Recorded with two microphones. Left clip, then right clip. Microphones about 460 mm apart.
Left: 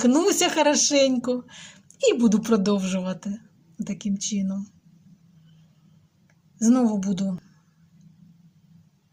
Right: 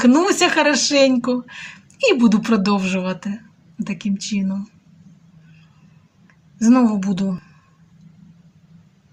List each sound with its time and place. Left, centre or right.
0.0 s speech: right
6.6 s speech: right